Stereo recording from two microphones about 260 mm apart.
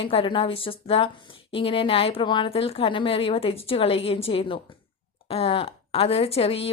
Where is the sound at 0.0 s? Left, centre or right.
Left.